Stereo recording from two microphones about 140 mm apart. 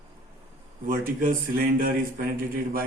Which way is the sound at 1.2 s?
90° right.